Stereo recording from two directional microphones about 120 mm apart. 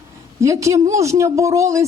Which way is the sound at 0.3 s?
25° right (ahead or behind).